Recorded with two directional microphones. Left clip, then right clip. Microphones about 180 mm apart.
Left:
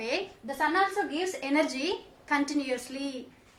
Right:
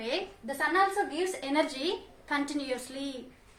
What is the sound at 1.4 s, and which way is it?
A woman's voice, 25° left (ahead or behind).